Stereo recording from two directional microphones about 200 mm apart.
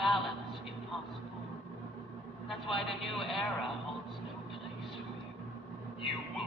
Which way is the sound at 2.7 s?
Centre (ahead or behind).